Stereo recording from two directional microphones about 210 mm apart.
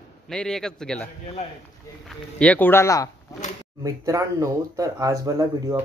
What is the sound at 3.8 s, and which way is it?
Speech, 15° right (ahead or behind).